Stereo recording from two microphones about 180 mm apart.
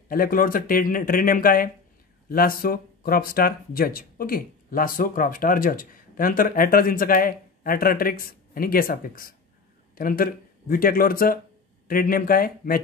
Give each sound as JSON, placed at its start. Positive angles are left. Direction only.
{"t": 0.1, "sound": "speech", "side_deg": 50}